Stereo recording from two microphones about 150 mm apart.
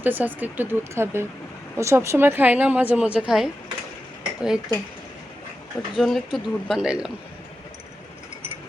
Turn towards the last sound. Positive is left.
turn(degrees=-5)  # may be behind; listen again after turning